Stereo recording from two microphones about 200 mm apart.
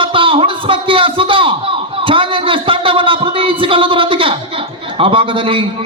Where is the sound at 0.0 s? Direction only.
25° right (ahead or behind).